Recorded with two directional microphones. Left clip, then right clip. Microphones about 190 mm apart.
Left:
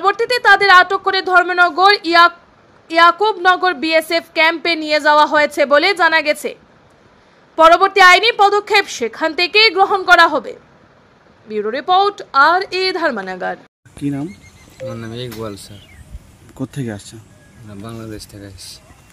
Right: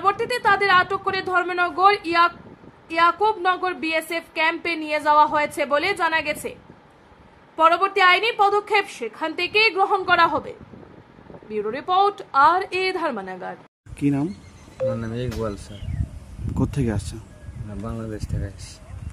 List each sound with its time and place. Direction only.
0.0 s a woman's voice: 15° left (ahead or behind)
7.5 s a woman's voice: 25° left (ahead or behind)
13.9 s speech: 5° left (ahead or behind)
16.5 s speech: 5° left (ahead or behind)